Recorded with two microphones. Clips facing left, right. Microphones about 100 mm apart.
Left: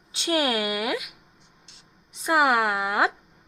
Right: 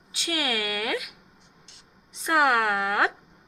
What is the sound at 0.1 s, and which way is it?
Speech, 25° left (ahead or behind).